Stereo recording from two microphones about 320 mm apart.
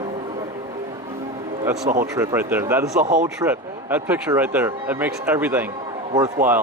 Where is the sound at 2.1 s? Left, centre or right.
Centre.